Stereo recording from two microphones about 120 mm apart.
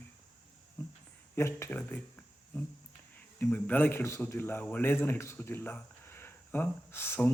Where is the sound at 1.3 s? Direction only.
20° left (ahead or behind).